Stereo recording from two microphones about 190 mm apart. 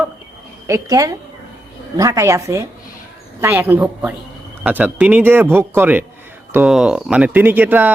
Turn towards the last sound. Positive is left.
turn(degrees=-10)  # may be behind; listen again after turning